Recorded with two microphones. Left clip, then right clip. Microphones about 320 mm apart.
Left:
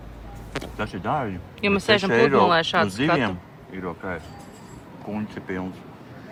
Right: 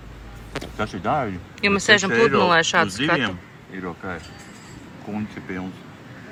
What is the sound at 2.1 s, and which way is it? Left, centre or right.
Speech, left.